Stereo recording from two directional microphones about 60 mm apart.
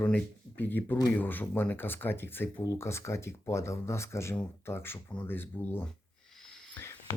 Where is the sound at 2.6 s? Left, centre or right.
Left.